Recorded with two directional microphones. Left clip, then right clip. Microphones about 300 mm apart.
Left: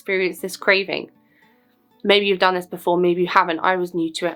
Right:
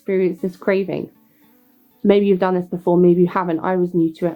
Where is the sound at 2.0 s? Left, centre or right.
Centre.